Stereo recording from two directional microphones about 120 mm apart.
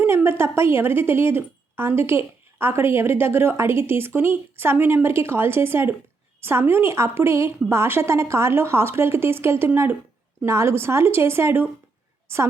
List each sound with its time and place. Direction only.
0.0 s a woman's voice: 20° right (ahead or behind)